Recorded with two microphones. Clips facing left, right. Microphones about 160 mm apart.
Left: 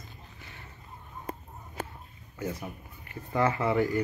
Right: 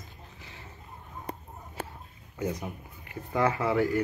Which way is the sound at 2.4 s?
15° right (ahead or behind).